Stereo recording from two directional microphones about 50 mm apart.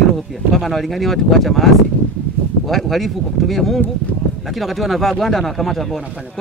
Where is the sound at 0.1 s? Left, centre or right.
Centre.